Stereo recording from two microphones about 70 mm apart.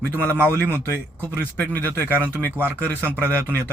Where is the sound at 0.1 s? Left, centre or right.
Left.